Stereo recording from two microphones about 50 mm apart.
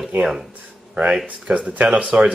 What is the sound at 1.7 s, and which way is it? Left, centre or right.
Speech, right.